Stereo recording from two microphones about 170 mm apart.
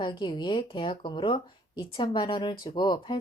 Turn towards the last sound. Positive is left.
turn(degrees=25)  # may be behind; listen again after turning